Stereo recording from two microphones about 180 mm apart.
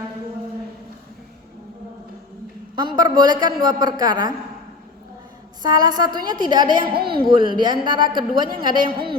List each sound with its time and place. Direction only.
2.7 s a woman's voice: 25° right (ahead or behind)
5.6 s a woman's voice: 20° right (ahead or behind)